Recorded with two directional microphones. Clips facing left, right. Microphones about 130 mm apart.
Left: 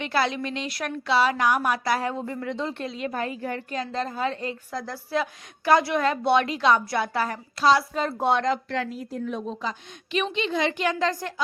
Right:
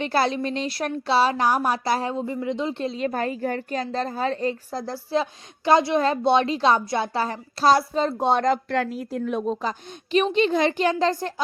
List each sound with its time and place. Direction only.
0.0 s a woman's voice: 35° right (ahead or behind); by 2.8 s 20° right (ahead or behind)
2.8 s a woman's voice: 35° right (ahead or behind)
8.4 s a woman's voice: 45° right (ahead or behind)
9.0 s a woman's voice: 65° right (ahead or behind); by 11.3 s 30° right (ahead or behind)